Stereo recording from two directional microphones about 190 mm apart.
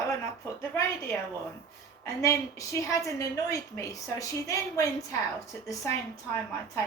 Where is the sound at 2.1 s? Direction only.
15° left (ahead or behind).